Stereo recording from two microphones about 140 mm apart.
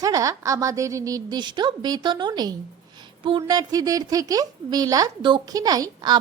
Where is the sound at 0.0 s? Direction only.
25° right (ahead or behind).